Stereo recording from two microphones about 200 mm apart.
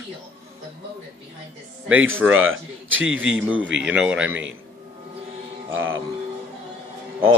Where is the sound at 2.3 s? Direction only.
85° right.